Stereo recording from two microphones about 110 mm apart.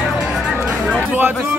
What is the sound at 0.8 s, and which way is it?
Speech, 15° right (ahead or behind).